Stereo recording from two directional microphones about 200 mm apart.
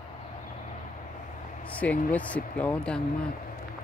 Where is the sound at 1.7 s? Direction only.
5° left (ahead or behind).